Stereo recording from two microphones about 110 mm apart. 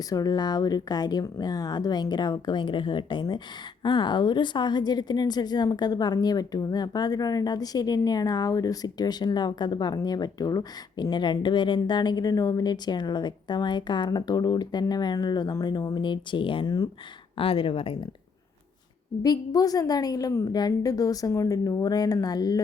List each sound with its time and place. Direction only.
0.1 s a woman's voice: 35° left (ahead or behind)
17.3 s speech: 55° left (ahead or behind)
19.2 s a woman's voice: 35° left (ahead or behind)